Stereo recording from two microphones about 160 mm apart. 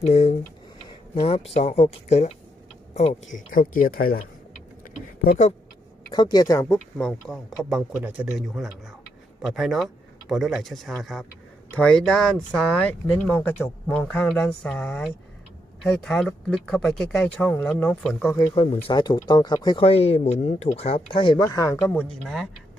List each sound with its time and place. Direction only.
0.0 s speech: 45° left (ahead or behind)
3.3 s speech: 60° left (ahead or behind)
6.1 s speech: 25° left (ahead or behind)
6.7 s speech: centre (ahead or behind)
18.3 s speech: 35° left (ahead or behind); by 22.0 s 15° left (ahead or behind)